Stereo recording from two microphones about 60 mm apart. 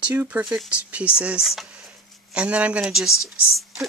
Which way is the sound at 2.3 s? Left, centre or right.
Centre.